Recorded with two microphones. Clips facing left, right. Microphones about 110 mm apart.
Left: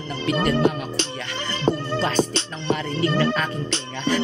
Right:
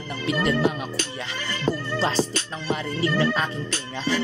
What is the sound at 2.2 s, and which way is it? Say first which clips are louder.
Speech: left 3 dB; 25° left (ahead or behind).